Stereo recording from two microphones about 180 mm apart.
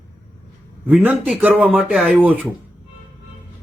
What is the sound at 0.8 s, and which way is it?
Speech, 5° right (ahead or behind).